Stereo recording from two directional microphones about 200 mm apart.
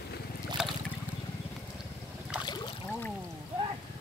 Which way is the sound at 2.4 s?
20° left (ahead or behind).